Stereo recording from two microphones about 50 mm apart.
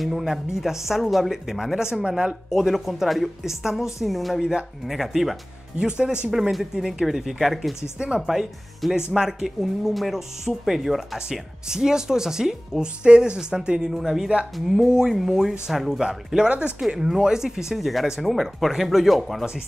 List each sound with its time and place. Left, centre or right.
0.0 s speech: centre
2.7 s speech: centre
5.8 s speech: centre
6.5 s speech: centre
8.0 s speech: centre
16.4 s speech: right
16.9 s speech: centre